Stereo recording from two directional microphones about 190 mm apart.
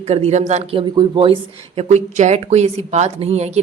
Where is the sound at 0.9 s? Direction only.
25° right (ahead or behind).